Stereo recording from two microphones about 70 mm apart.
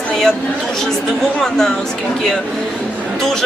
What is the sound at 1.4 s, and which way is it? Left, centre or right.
Speech, centre.